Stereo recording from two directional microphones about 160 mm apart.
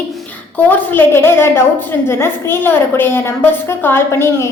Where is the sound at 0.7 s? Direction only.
15° left (ahead or behind).